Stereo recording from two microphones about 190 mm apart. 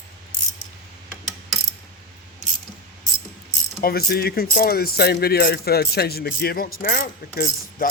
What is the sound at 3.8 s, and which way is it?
Speech, 55° left (ahead or behind).